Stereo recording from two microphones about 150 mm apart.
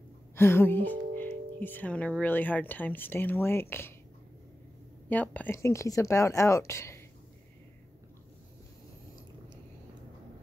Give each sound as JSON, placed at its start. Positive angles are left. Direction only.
{"t": 0.4, "sound": "speech", "side_deg": 15}
{"t": 5.1, "sound": "speech", "side_deg": 10}